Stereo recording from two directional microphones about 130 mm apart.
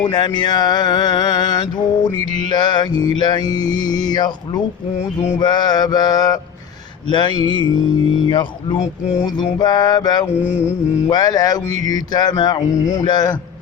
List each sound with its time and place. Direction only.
0.0 s mantra: 35° left (ahead or behind)
11.1 s a sound: 30° left (ahead or behind)
11.9 s mantra: 30° left (ahead or behind)